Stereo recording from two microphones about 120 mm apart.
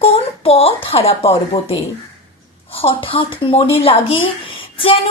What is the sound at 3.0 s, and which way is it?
A woman's voice, 45° left (ahead or behind).